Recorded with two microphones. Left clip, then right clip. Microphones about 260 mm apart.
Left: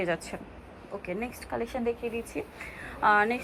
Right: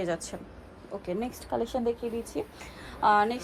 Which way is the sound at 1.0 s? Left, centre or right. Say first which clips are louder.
Right 2 dB; centre.